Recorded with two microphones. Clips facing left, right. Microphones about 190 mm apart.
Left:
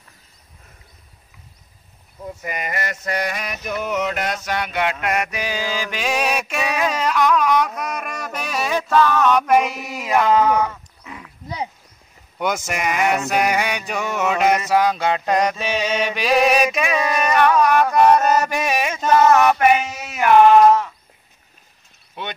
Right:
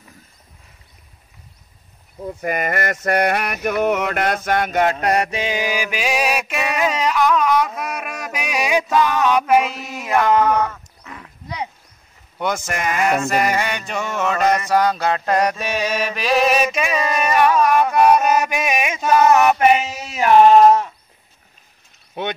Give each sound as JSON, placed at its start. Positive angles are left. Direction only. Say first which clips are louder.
{"t": 2.4, "sound": "a sound", "louder": "right 6 dB", "side_deg": -55}
{"t": 4.9, "sound": "mantra", "louder": "right 4 dB", "side_deg": -35}
{"t": 9.7, "sound": "speech", "louder": "even", "side_deg": 5}
{"t": 12.4, "sound": "speech", "louder": "even", "side_deg": 5}
{"t": 13.3, "sound": "mantra", "louder": "even", "side_deg": 5}
{"t": 15.5, "sound": "mantra", "louder": "even", "side_deg": -5}
{"t": 19.6, "sound": "a sound", "louder": "right 1 dB", "side_deg": -25}